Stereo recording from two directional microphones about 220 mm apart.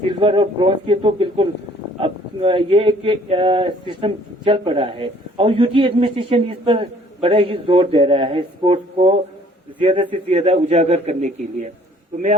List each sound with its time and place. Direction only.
0.2 s speech: 25° right (ahead or behind)